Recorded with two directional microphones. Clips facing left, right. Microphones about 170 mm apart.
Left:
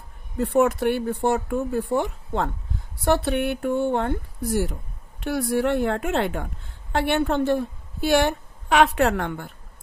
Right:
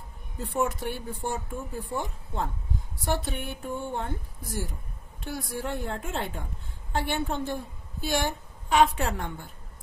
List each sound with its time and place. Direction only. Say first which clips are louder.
0.4 s a woman's voice: left 9 dB; 65° left (ahead or behind)